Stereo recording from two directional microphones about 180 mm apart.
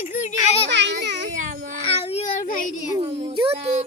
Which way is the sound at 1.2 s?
45° right (ahead or behind).